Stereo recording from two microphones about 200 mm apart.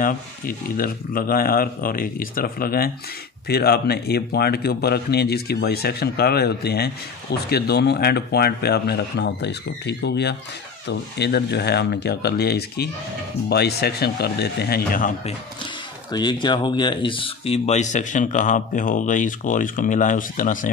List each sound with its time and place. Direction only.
0.0 s speech: 45° left (ahead or behind)
16.1 s speech: 20° left (ahead or behind); by 20.7 s 40° left (ahead or behind)